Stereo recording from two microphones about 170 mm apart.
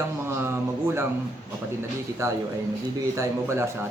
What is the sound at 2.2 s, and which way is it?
Speech, 15° right (ahead or behind).